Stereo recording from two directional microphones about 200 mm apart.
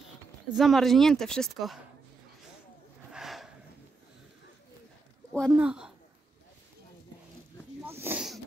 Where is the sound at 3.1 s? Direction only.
Centre (ahead or behind).